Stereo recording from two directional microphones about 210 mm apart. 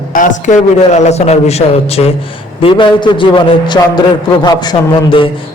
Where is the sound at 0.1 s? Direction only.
40° left (ahead or behind).